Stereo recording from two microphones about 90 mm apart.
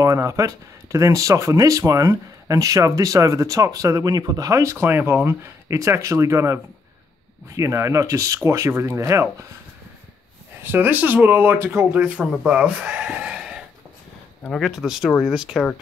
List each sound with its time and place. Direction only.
0.0 s speech: 35° right (ahead or behind)
10.6 s speech: 20° right (ahead or behind); by 15.6 s 5° right (ahead or behind)